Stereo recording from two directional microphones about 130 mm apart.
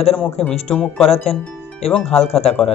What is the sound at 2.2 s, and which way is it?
Speech, 55° left (ahead or behind).